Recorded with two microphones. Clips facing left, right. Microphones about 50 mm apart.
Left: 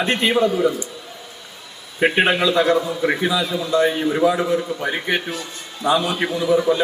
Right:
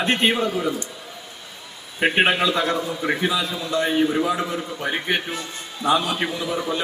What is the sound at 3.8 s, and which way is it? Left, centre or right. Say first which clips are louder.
A man's voice: left 2 dB; centre.